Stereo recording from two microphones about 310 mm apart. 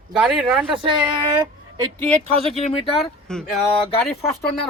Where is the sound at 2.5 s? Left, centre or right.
Centre.